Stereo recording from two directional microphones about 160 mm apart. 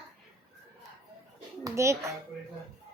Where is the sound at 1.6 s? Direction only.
20° right (ahead or behind).